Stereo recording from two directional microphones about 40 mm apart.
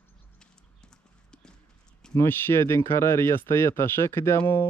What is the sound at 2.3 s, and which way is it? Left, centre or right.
Speech, left.